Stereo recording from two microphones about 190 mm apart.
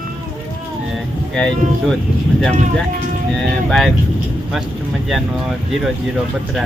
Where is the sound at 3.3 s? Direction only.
Centre (ahead or behind).